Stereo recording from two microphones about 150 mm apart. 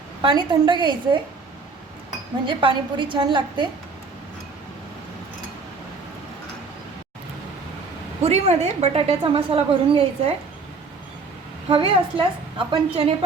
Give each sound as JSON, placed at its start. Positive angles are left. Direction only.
{"t": 0.2, "sound": "a woman's voice", "side_deg": -30}
{"t": 2.5, "sound": "a woman's voice", "side_deg": -35}
{"t": 8.2, "sound": "a woman's voice", "side_deg": -45}
{"t": 11.7, "sound": "a woman's voice", "side_deg": -35}